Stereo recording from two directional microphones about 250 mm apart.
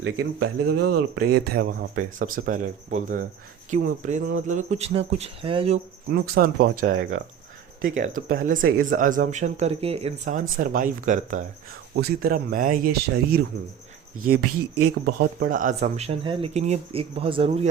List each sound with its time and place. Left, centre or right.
0.0 s speech: right
6.1 s speech: right
14.5 s speech: right
15.2 s speech: right